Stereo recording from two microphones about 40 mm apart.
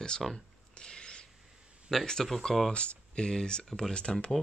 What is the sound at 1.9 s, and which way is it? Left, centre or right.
Speech, centre.